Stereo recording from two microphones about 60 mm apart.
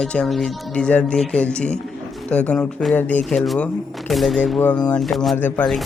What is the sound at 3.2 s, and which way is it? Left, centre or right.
Speech, centre.